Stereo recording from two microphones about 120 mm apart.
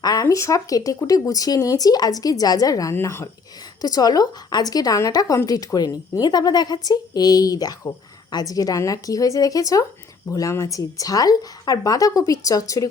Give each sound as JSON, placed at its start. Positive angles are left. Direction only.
{"t": 0.0, "sound": "speech", "side_deg": 30}
{"t": 3.8, "sound": "speech", "side_deg": 30}